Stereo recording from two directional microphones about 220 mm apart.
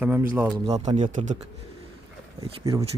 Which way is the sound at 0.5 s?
20° right (ahead or behind).